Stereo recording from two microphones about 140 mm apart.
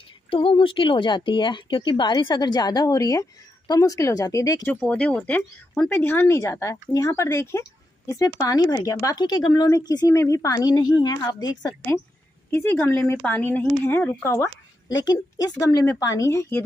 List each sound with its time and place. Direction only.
0.3 s speech: 40° left (ahead or behind); by 4.7 s 25° left (ahead or behind)
4.8 s speech: 10° left (ahead or behind); by 11.7 s 30° left (ahead or behind)
12.4 s speech: 15° left (ahead or behind)